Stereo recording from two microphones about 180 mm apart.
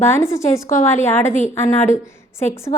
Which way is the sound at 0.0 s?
15° left (ahead or behind).